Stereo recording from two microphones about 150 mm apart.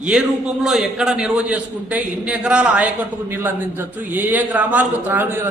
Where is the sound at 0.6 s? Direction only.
5° right (ahead or behind).